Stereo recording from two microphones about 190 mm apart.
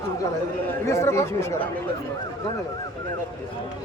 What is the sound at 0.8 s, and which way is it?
Speech, 15° left (ahead or behind).